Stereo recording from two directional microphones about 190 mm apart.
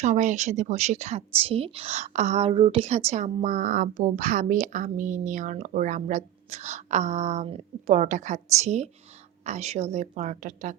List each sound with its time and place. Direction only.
0.0 s a woman's voice: 40° right (ahead or behind)